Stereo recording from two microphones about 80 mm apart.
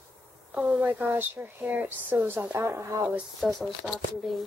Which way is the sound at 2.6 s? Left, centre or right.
Right.